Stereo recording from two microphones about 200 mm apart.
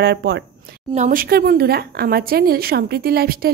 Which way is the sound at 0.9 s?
40° right (ahead or behind).